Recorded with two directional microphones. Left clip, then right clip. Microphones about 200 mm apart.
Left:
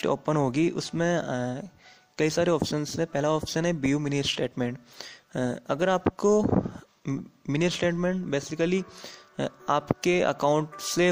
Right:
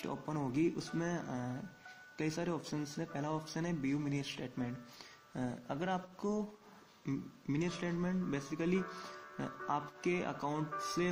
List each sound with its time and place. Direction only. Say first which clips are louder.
0.0 s a man's voice: left 15 dB; 50° left (ahead or behind)